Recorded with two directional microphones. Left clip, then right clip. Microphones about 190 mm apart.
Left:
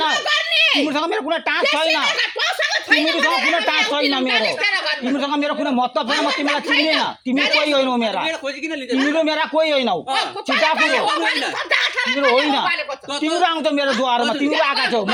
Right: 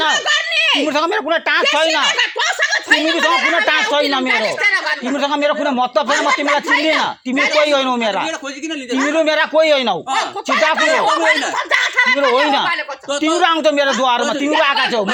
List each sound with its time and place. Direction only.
0.9 s speech: 50° right (ahead or behind)
2.1 s giggle: 15° right (ahead or behind)
4.3 s speech: 25° right (ahead or behind)
5.2 s speech: 50° right (ahead or behind)
6.1 s speech: 25° right (ahead or behind)
7.7 s speech: 50° right (ahead or behind)
9.1 s speech: 50° right (ahead or behind)
10.2 s speech: 20° right (ahead or behind)
13.4 s speech: 50° right (ahead or behind)